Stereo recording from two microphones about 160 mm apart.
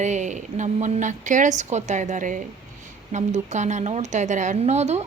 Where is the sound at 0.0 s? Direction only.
50° right (ahead or behind).